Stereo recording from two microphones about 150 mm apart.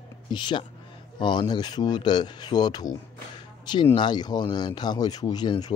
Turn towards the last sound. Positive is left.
turn(degrees=25)  # may be behind; listen again after turning